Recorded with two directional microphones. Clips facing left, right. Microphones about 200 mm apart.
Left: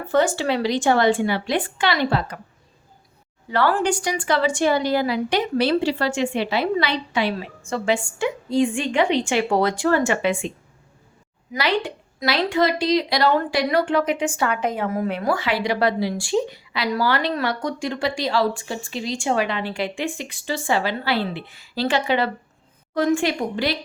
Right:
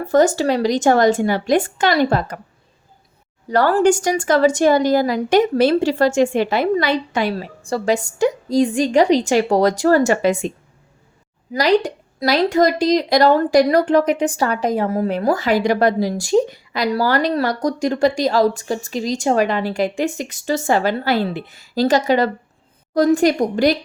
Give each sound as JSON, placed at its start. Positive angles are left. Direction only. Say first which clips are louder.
{"t": 0.0, "sound": "speech", "louder": "right 5 dB", "side_deg": -40}
{"t": 3.5, "sound": "a woman's voice", "louder": "right 6 dB", "side_deg": -40}
{"t": 11.5, "sound": "a woman's voice", "louder": "right 7 dB", "side_deg": -40}